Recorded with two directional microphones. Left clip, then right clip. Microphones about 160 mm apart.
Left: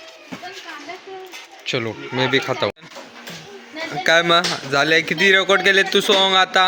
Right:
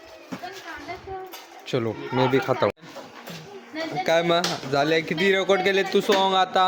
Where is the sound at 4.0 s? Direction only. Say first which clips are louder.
Left 6 dB; 5° right (ahead or behind).